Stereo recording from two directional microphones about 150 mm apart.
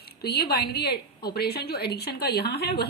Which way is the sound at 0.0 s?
90° left.